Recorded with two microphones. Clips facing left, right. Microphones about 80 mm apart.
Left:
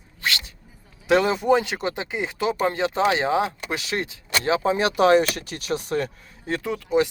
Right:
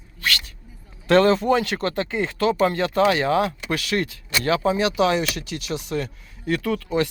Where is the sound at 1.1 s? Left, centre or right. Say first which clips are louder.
Right 2 dB; centre.